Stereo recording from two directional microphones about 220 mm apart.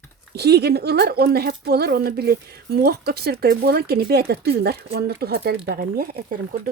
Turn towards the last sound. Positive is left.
turn(degrees=-40)  # may be behind; listen again after turning